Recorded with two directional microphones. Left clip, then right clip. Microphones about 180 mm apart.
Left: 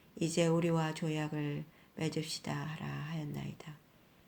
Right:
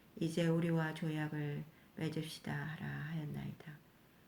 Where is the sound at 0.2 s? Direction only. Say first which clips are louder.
Left 5 dB; 30° left (ahead or behind).